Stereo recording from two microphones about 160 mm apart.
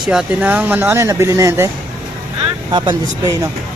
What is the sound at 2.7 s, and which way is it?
Speech, 30° right (ahead or behind).